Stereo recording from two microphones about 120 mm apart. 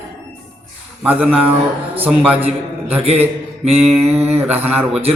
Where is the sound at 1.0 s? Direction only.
10° right (ahead or behind).